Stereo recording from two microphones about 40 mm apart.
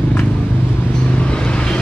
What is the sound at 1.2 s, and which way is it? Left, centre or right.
Vehicle, left.